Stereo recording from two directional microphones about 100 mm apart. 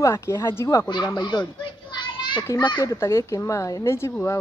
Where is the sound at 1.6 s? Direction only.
50° left (ahead or behind).